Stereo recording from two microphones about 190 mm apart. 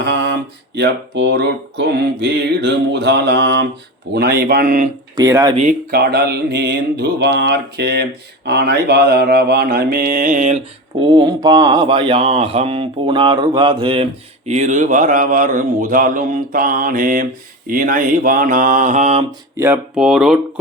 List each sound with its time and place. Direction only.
0.8 s mantra: 65° right (ahead or behind)
4.1 s mantra: 55° right (ahead or behind)
5.1 s speech: 15° right (ahead or behind)
5.9 s mantra: 55° right (ahead or behind)
11.0 s speech: 25° right (ahead or behind); by 17.2 s 45° right (ahead or behind)
17.7 s mantra: 45° right (ahead or behind)
19.5 s speech: 15° right (ahead or behind)
20.0 s speech: centre (ahead or behind)